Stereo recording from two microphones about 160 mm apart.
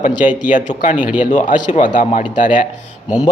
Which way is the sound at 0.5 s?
55° left (ahead or behind).